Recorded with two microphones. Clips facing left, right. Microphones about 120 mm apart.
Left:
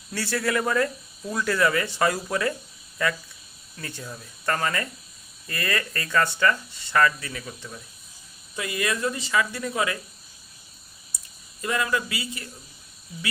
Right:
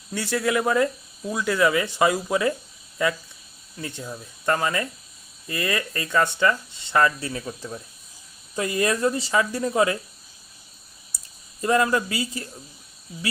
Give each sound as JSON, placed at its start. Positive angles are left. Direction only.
{"t": 0.1, "sound": "speech", "side_deg": -15}
{"t": 11.6, "sound": "speech", "side_deg": -35}